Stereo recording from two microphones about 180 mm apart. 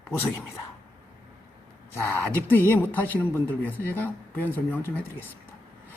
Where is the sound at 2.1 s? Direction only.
10° left (ahead or behind).